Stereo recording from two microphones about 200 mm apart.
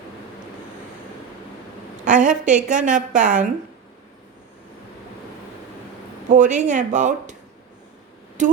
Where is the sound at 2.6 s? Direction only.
40° right (ahead or behind).